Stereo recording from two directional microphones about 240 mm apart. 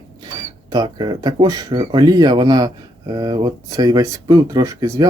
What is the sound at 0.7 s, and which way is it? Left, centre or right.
Speech, centre.